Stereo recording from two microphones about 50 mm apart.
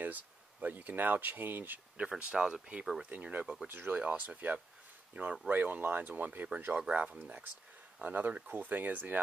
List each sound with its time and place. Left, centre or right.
0.0 s speech: right
2.0 s speech: right
3.1 s speech: right
5.2 s speech: right
5.5 s speech: right
6.7 s speech: centre
7.0 s speech: right